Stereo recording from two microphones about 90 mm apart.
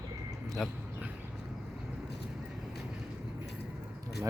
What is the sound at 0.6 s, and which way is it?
Speech, 5° right (ahead or behind).